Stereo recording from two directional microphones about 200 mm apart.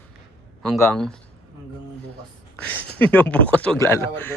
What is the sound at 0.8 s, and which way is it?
Speech, 5° left (ahead or behind).